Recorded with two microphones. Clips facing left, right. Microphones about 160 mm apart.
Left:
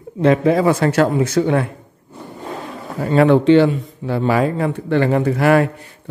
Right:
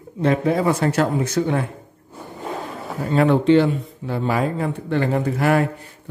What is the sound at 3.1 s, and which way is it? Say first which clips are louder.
Speech: left 4 dB; 90° left.